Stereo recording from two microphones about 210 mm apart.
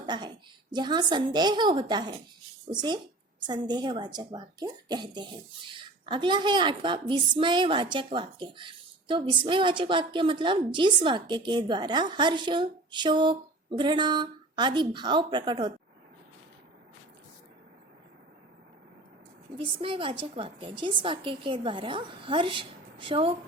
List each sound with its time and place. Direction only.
0.0 s a woman's voice: 20° right (ahead or behind)
19.5 s a woman's voice: 25° right (ahead or behind)